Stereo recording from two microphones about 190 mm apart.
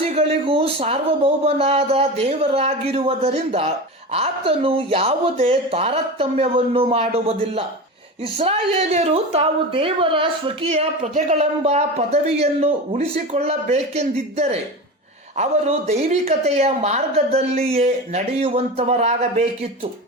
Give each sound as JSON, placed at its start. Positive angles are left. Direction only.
{"t": 0.1, "sound": "a woman's voice", "side_deg": -30}
{"t": 8.4, "sound": "a woman's voice", "side_deg": -30}